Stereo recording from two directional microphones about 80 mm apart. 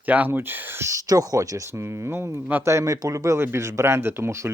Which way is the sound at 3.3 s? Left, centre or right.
Right.